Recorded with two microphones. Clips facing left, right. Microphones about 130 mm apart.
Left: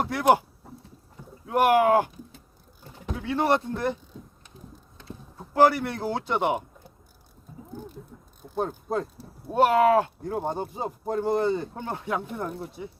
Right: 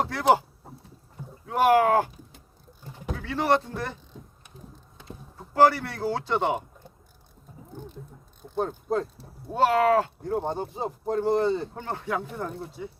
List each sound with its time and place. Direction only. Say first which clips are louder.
0.1 s speech: left 2 dB; 15° left (ahead or behind)
1.5 s speech: even; 15° left (ahead or behind)
3.2 s speech: even; 15° left (ahead or behind)
5.5 s speech: even; 15° left (ahead or behind)
8.5 s speech: right 1 dB; 10° left (ahead or behind)